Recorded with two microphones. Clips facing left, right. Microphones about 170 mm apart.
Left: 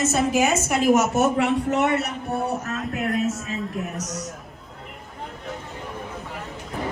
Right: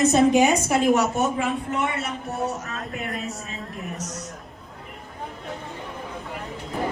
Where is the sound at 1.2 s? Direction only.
75° left (ahead or behind).